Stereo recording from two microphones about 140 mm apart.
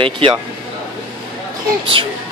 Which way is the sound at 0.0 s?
40° right (ahead or behind).